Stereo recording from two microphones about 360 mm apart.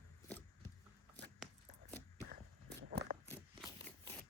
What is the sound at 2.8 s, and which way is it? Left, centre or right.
Biting, right.